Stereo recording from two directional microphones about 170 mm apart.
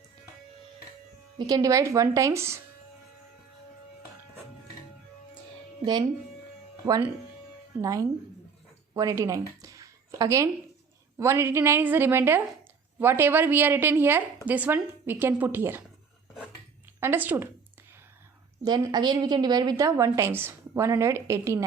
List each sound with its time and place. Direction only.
1.4 s a woman's voice: 25° right (ahead or behind)
5.8 s speech: 25° right (ahead or behind)
7.8 s a woman's voice: 20° right (ahead or behind)
8.9 s a sound: 20° right (ahead or behind)
11.2 s a woman's voice: 15° right (ahead or behind)
17.0 s a woman's voice: 10° right (ahead or behind)
18.6 s a woman's voice: 25° right (ahead or behind)